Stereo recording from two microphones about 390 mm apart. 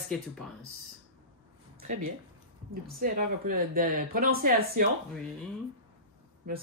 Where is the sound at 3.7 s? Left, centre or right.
Right.